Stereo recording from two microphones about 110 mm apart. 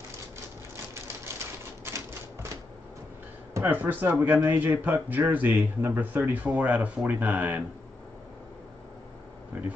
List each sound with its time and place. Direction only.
3.5 s speech: 15° right (ahead or behind)
9.5 s air conditioning: 15° right (ahead or behind)